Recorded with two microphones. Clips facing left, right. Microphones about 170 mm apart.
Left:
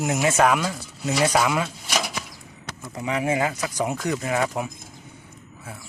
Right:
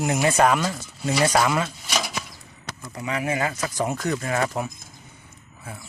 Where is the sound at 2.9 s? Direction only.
20° left (ahead or behind).